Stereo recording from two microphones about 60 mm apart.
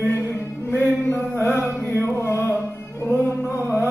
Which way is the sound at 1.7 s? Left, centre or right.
Left.